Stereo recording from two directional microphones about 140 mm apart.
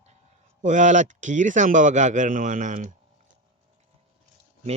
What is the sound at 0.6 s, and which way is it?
Speech, 60° right (ahead or behind).